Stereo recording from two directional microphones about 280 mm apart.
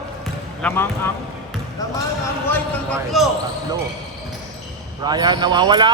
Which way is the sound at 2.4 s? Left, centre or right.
Centre.